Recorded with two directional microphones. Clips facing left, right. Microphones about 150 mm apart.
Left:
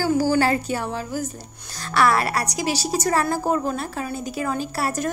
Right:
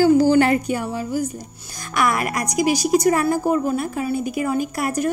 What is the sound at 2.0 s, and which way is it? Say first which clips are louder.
Speech: left 2 dB; 15° right (ahead or behind).